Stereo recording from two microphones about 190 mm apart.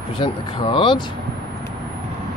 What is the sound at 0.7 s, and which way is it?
Speech, 25° left (ahead or behind).